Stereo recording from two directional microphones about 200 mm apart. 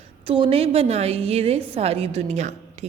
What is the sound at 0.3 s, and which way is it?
A woman's voice, 25° right (ahead or behind).